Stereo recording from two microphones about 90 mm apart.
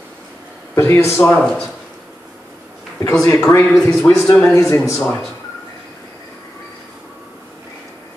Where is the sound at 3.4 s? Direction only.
30° left (ahead or behind).